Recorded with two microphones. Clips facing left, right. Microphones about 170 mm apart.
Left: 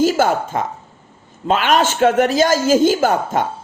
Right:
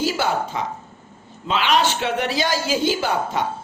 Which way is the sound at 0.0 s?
45° left (ahead or behind).